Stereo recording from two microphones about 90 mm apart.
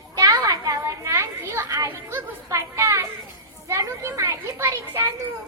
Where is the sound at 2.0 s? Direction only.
30° right (ahead or behind).